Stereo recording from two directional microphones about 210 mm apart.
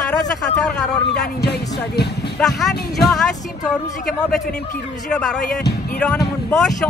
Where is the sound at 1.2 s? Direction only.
50° left (ahead or behind).